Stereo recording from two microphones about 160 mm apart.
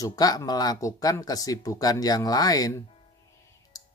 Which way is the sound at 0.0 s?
25° left (ahead or behind).